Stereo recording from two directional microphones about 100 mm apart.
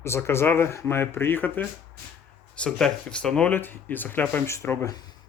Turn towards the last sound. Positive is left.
turn(degrees=25)  # may be behind; listen again after turning